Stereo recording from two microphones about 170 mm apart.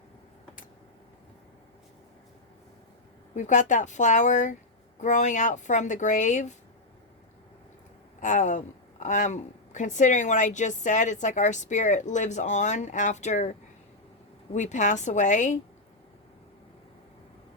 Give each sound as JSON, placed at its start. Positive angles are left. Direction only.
{"t": 3.3, "sound": "a woman's voice", "side_deg": 45}
{"t": 8.2, "sound": "a woman's voice", "side_deg": 45}
{"t": 14.5, "sound": "a woman's voice", "side_deg": 45}